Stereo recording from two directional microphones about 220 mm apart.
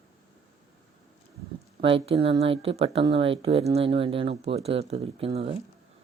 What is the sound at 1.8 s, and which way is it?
Speech, 25° right (ahead or behind).